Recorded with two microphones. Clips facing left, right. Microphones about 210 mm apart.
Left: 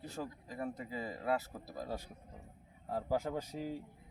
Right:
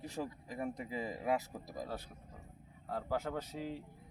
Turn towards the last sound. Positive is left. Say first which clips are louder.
# left 1 dB
turn(degrees=10)  # may be behind; listen again after turning